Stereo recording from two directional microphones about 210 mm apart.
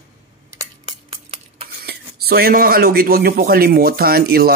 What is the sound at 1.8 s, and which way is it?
A man's voice, 50° right (ahead or behind).